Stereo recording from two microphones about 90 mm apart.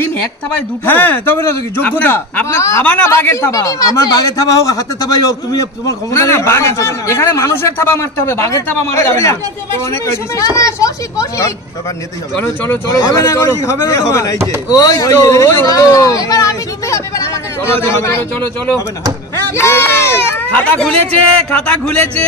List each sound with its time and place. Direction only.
0.8 s speech: 20° left (ahead or behind)
2.8 s a man's voice: 15° left (ahead or behind)
3.1 s speech: 30° left (ahead or behind)
12.9 s speech: 35° left (ahead or behind)
19.5 s speech: 30° left (ahead or behind); by 22.2 s 10° left (ahead or behind)